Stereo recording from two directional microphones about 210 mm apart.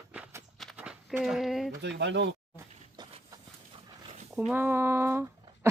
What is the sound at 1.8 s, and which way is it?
Speech, 55° right (ahead or behind).